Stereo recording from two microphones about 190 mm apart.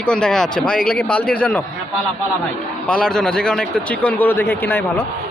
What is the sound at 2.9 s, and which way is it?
A man's voice, 5° left (ahead or behind).